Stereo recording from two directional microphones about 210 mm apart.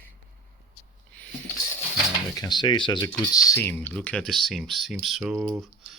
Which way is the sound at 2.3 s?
20° left (ahead or behind).